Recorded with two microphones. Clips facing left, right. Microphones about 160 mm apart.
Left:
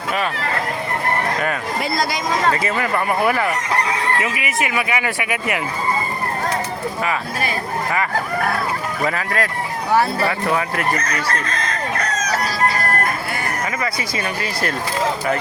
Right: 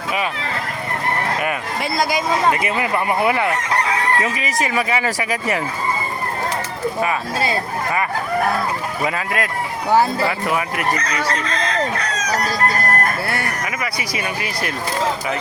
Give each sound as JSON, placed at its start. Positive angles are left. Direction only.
{"t": 1.4, "sound": "speech", "side_deg": -5}
{"t": 4.2, "sound": "speech", "side_deg": -35}
{"t": 7.0, "sound": "speech", "side_deg": -25}
{"t": 9.0, "sound": "speech", "side_deg": -20}
{"t": 10.8, "sound": "chicken", "side_deg": 50}